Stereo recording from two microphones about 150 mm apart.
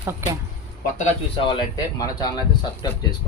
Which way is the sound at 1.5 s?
30° left (ahead or behind).